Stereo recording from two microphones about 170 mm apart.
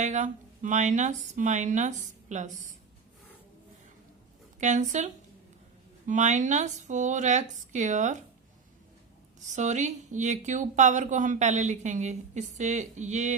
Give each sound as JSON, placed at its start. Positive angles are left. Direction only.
{"t": 0.0, "sound": "a woman's voice", "side_deg": -45}
{"t": 4.6, "sound": "a woman's voice", "side_deg": -45}
{"t": 9.5, "sound": "a woman's voice", "side_deg": -45}